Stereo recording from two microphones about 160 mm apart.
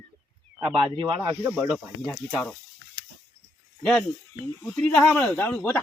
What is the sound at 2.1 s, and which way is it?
Speech, 10° left (ahead or behind).